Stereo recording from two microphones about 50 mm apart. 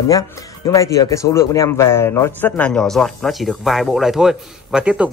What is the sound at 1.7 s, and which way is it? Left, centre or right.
Speech, left.